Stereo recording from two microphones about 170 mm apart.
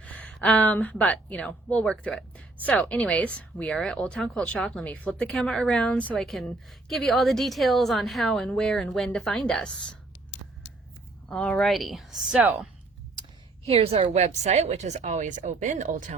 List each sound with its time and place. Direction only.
0.0 s speech: 5° left (ahead or behind)
11.3 s speech: 5° left (ahead or behind); by 12.6 s 10° right (ahead or behind)
13.7 s a woman's voice: 35° right (ahead or behind)